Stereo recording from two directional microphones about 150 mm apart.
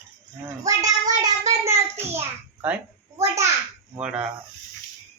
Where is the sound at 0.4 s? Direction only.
20° right (ahead or behind).